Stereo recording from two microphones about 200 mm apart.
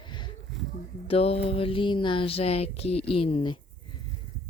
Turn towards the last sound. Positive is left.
turn(degrees=25)  # may be behind; listen again after turning